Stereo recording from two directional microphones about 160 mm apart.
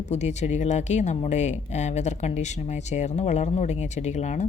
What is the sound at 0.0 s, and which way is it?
Speech, 45° left (ahead or behind).